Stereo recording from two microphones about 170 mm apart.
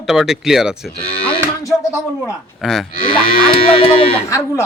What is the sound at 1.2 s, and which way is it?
Music, 15° left (ahead or behind).